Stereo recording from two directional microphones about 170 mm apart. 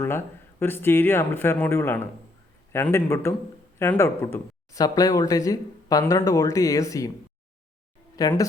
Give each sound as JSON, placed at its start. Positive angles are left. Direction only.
{"t": 0.0, "sound": "speech", "side_deg": 15}
{"t": 8.1, "sound": "speech", "side_deg": 20}